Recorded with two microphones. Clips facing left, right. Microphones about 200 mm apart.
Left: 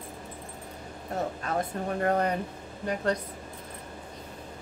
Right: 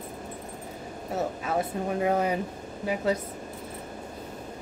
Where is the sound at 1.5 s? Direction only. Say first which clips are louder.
Right 3 dB; 5° right (ahead or behind).